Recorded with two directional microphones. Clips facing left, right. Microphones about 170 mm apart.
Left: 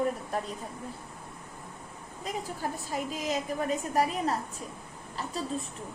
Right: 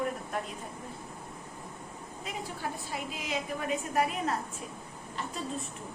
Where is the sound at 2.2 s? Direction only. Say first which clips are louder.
Left 3 dB; 40° left (ahead or behind).